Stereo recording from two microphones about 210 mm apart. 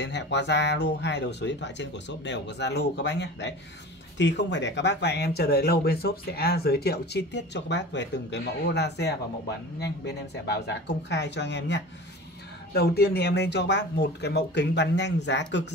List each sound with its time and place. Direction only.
0.0 s speech: 55° left (ahead or behind)